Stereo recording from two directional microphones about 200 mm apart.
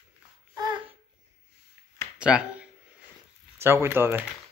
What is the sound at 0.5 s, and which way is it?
Babbling, 25° right (ahead or behind).